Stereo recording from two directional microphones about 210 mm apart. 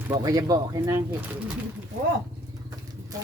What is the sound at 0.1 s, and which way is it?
Speech, 15° right (ahead or behind).